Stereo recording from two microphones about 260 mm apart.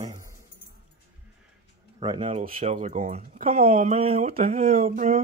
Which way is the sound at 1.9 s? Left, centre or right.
Centre.